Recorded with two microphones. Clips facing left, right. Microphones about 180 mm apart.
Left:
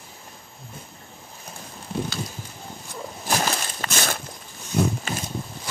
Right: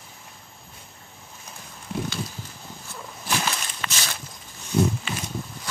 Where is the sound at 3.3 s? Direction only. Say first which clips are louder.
Left 3 dB; 40° left (ahead or behind).